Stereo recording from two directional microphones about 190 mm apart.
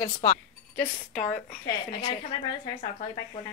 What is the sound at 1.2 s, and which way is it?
A woman's voice, 40° left (ahead or behind).